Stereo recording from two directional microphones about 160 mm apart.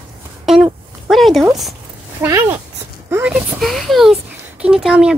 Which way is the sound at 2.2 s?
15° right (ahead or behind).